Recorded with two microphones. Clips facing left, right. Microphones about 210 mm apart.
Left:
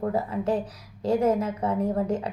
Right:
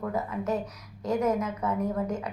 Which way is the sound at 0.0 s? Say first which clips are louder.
Left 4 dB; 30° left (ahead or behind).